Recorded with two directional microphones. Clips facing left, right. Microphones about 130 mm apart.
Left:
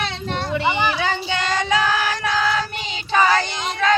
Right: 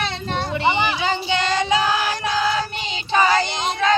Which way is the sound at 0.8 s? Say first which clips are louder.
Even; 15° right (ahead or behind).